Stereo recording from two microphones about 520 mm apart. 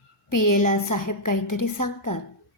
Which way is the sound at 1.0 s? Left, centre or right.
Left.